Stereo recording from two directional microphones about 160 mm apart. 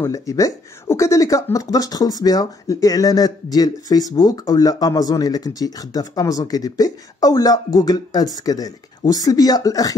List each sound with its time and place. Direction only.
0.0 s speech: 20° left (ahead or behind)